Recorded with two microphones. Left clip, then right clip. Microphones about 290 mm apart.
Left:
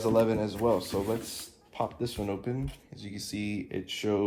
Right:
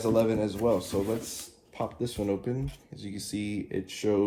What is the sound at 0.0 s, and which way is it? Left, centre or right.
Speech, left.